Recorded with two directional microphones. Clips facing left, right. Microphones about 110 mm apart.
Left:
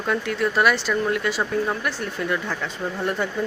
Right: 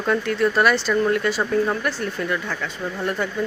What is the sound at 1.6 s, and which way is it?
Speech, 5° left (ahead or behind).